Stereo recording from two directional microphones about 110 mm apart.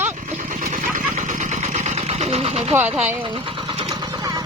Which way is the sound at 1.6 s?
90° right.